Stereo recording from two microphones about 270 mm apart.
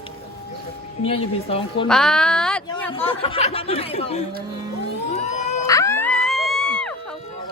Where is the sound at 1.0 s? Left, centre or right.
Left.